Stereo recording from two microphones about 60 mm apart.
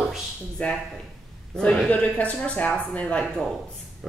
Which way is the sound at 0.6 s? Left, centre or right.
Left.